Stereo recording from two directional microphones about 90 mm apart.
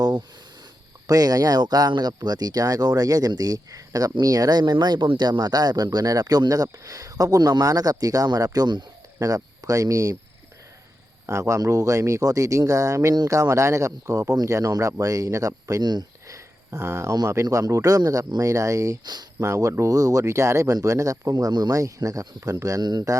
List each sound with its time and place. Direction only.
0.0 s a sound: 50° right (ahead or behind)
1.0 s speech: 45° right (ahead or behind)
11.3 s speech: 35° right (ahead or behind)
15.8 s speech: 50° right (ahead or behind)
16.2 s a sound: 35° right (ahead or behind)
17.2 s speech: 40° right (ahead or behind)
19.0 s speech: 50° right (ahead or behind)
19.4 s speech: 35° right (ahead or behind)